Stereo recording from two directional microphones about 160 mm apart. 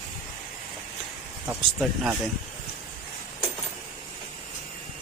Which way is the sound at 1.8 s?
Centre (ahead or behind).